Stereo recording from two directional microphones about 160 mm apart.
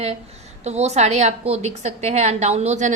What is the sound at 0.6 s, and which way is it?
A woman's voice, 45° right (ahead or behind).